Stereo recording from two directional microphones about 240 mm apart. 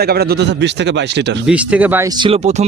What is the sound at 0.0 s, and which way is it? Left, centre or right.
A man's voice, right.